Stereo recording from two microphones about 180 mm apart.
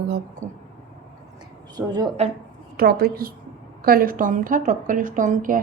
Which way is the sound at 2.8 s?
60° right (ahead or behind).